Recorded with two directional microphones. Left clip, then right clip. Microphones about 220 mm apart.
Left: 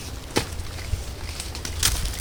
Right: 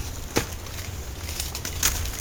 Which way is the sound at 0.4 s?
5° right (ahead or behind).